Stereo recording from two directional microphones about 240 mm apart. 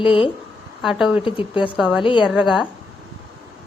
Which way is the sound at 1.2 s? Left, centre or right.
Left.